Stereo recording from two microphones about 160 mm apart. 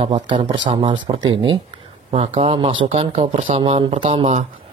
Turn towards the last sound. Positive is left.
turn(degrees=-40)  # may be behind; listen again after turning